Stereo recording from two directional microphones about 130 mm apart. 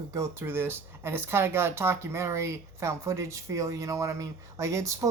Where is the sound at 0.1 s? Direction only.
20° right (ahead or behind).